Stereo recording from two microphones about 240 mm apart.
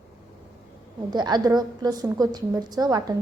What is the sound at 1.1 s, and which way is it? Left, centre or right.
A woman's voice, centre.